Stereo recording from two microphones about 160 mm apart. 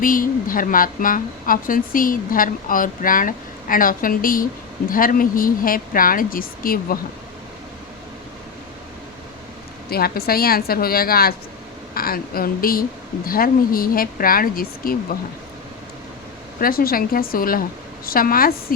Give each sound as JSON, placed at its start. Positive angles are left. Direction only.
{"t": 0.0, "sound": "a woman's voice", "side_deg": 60}
{"t": 9.9, "sound": "a woman's voice", "side_deg": 75}
{"t": 16.6, "sound": "a woman's voice", "side_deg": 65}